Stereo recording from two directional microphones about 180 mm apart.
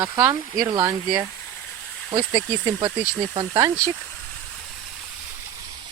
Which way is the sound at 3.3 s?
25° right (ahead or behind).